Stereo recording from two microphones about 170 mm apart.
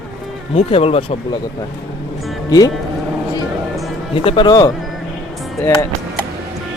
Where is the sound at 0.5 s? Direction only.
35° left (ahead or behind).